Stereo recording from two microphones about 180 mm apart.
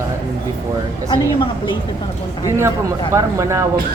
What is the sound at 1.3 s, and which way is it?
Speech, 25° left (ahead or behind).